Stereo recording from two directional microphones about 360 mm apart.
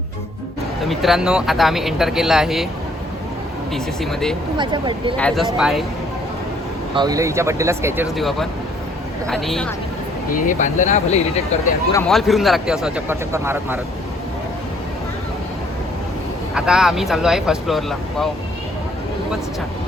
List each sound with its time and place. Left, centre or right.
0.8 s a man's voice: centre
4.0 s a man's voice: centre
4.5 s speech: centre
5.1 s a man's voice: centre
6.9 s a man's voice: centre
10.2 s speech: left
11.9 s a man's voice: centre
16.6 s a man's voice: centre